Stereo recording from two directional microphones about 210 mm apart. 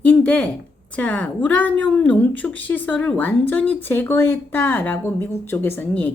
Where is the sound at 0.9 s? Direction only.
5° left (ahead or behind).